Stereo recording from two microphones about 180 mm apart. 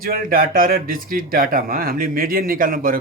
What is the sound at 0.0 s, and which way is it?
A man's voice, 55° right (ahead or behind).